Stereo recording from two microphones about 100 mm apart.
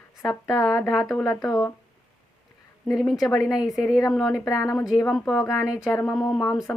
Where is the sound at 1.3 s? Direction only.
35° left (ahead or behind).